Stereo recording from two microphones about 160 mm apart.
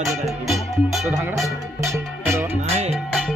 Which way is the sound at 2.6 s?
40° right (ahead or behind).